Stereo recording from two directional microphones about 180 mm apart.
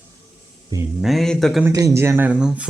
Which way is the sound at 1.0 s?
Centre (ahead or behind).